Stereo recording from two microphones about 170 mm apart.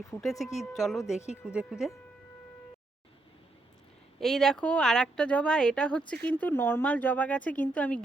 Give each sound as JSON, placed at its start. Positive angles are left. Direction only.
{"t": 0.1, "sound": "speech", "side_deg": 0}
{"t": 4.2, "sound": "speech", "side_deg": 0}